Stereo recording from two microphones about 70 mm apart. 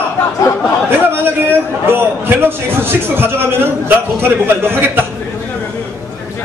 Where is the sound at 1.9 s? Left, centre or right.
Right.